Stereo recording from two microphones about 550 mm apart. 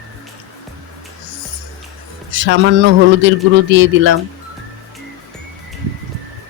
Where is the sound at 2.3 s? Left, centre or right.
Centre.